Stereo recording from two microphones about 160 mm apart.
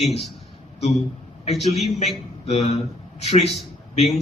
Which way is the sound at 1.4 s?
40° left (ahead or behind).